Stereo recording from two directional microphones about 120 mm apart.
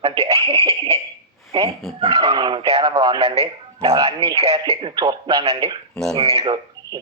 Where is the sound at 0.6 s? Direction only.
30° right (ahead or behind).